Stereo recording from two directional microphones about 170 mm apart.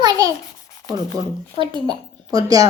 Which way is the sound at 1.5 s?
30° right (ahead or behind).